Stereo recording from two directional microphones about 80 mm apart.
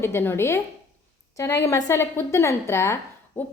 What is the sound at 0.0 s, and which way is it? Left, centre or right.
A woman's voice, left.